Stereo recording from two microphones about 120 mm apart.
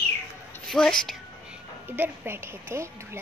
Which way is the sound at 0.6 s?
5° left (ahead or behind).